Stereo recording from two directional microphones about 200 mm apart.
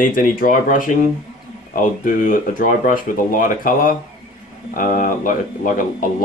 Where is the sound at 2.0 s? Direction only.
40° left (ahead or behind).